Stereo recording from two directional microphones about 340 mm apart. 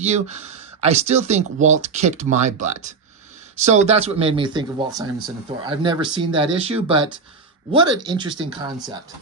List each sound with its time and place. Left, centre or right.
0.0 s speech: centre